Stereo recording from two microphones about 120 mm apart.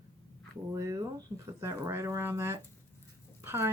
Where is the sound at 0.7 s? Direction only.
25° right (ahead or behind).